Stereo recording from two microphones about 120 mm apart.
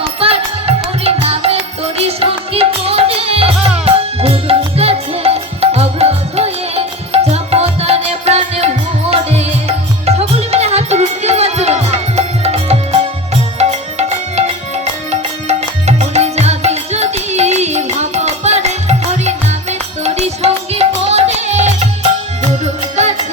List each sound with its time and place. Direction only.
0.2 s music: 55° right (ahead or behind)
15.1 s music: 65° right (ahead or behind)